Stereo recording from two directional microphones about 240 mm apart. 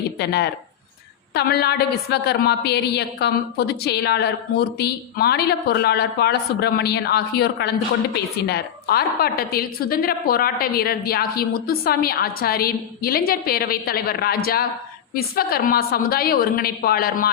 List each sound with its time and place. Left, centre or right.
0.2 s a woman's voice: left